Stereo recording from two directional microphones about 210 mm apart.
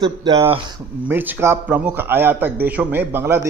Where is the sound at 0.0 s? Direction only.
25° right (ahead or behind).